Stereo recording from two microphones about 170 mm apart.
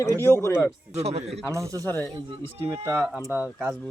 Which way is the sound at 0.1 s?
15° right (ahead or behind).